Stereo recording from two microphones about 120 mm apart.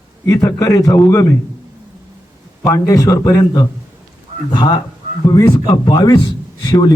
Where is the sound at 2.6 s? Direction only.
25° left (ahead or behind).